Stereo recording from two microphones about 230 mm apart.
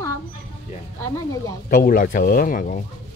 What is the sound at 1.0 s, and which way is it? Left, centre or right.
Speech, centre.